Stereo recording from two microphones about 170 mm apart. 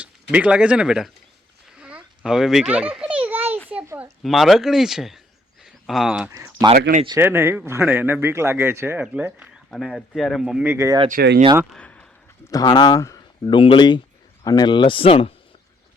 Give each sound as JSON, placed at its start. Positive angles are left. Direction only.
{"t": 0.0, "sound": "speech", "side_deg": -10}
{"t": 1.8, "sound": "children playing", "side_deg": -5}
{"t": 3.7, "sound": "a sound", "side_deg": -10}
{"t": 4.2, "sound": "speech", "side_deg": 0}
{"t": 6.3, "sound": "speech", "side_deg": -20}
{"t": 11.1, "sound": "speech", "side_deg": -75}
{"t": 11.7, "sound": "a sound", "side_deg": 5}
{"t": 12.5, "sound": "speech", "side_deg": 25}